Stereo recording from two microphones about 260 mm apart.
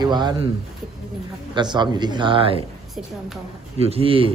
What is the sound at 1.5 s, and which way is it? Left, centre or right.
A man's voice, centre.